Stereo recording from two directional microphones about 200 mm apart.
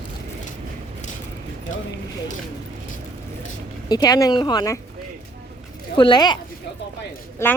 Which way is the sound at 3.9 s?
20° left (ahead or behind).